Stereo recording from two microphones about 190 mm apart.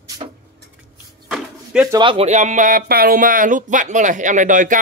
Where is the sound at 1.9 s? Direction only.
25° right (ahead or behind); by 4.8 s 45° right (ahead or behind).